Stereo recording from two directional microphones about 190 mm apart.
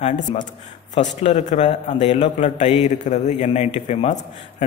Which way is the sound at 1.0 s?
40° left (ahead or behind).